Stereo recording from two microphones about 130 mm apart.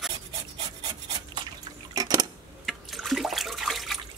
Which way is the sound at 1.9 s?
30° right (ahead or behind).